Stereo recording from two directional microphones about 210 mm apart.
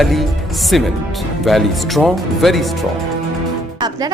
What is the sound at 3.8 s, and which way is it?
Speech, 20° right (ahead or behind).